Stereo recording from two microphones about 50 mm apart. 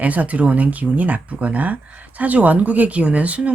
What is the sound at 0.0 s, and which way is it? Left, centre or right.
Speech, right.